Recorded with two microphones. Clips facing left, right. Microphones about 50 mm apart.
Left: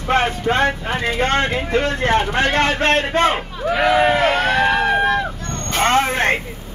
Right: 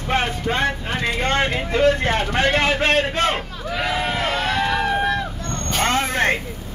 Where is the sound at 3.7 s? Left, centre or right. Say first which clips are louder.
Left 8 dB; left.